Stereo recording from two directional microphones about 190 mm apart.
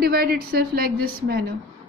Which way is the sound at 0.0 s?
50° right (ahead or behind).